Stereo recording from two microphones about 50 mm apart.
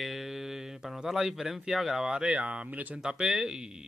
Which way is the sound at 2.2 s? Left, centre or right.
Right.